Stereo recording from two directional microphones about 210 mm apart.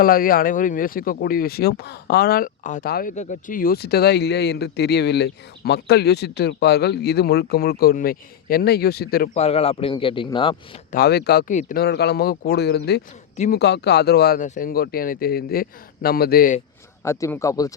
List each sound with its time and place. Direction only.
0.0 s speech: 45° left (ahead or behind)
9.3 s speech: 30° left (ahead or behind)
10.9 s speech: 50° left (ahead or behind)
17.0 s speech: 15° left (ahead or behind)